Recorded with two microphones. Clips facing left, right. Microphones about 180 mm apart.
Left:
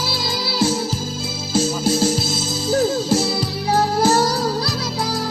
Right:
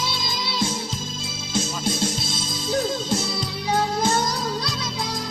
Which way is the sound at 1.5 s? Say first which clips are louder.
Left 7 dB; 30° left (ahead or behind).